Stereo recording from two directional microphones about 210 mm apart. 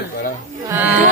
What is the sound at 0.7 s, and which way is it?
Speech, 10° right (ahead or behind).